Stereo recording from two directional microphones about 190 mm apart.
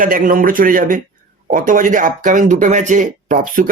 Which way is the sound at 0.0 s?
45° right (ahead or behind).